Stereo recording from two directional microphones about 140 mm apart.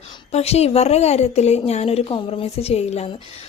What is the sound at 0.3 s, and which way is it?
Speech, 50° left (ahead or behind).